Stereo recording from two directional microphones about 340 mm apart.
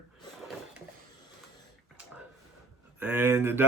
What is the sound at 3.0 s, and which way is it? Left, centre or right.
Speech, centre.